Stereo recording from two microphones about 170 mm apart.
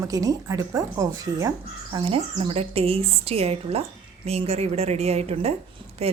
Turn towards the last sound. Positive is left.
turn(degrees=-35)  # may be behind; listen again after turning